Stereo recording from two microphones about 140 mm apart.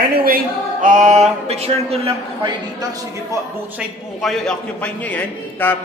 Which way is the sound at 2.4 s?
25° right (ahead or behind).